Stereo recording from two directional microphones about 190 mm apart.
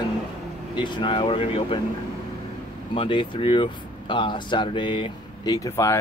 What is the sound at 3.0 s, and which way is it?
Speech, 25° left (ahead or behind).